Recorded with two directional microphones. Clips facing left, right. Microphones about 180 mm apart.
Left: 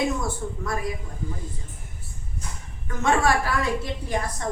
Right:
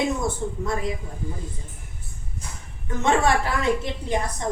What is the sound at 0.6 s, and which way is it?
Speech, 25° right (ahead or behind).